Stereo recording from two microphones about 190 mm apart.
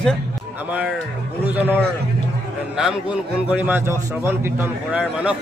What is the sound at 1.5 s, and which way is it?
A man's voice, 10° right (ahead or behind).